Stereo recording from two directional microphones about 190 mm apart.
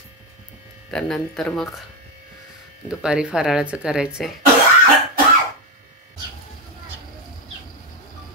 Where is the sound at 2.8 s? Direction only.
5° right (ahead or behind).